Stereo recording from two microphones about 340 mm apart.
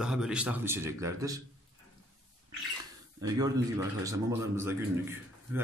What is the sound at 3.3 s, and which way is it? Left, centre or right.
A man's voice, centre.